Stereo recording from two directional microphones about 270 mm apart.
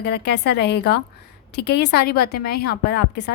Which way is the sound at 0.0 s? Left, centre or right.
Left.